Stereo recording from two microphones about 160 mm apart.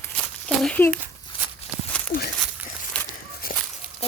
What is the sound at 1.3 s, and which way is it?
Walk, 35° left (ahead or behind).